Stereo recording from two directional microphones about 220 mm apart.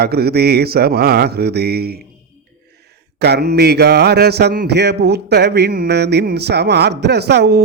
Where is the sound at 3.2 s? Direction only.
45° right (ahead or behind).